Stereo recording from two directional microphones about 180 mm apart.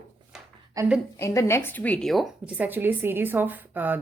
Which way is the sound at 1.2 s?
15° left (ahead or behind).